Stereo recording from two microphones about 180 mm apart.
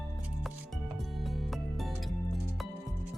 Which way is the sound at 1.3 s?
Centre (ahead or behind).